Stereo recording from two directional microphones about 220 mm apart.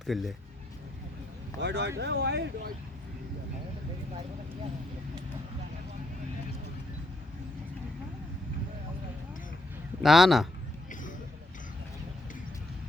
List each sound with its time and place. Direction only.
0.0 s a man's voice: centre (ahead or behind)
1.6 s speech: 50° right (ahead or behind)
10.0 s a man's voice: centre (ahead or behind)